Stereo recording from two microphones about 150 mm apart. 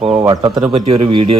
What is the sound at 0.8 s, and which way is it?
Speech, 40° right (ahead or behind).